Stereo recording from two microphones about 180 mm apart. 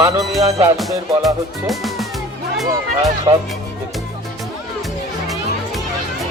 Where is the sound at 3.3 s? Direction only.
20° right (ahead or behind).